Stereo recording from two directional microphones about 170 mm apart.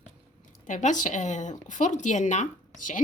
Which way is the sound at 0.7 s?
45° left (ahead or behind).